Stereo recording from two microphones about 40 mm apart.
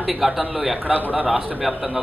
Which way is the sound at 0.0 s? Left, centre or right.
Centre.